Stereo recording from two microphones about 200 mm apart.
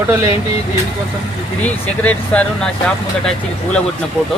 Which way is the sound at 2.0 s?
5° left (ahead or behind).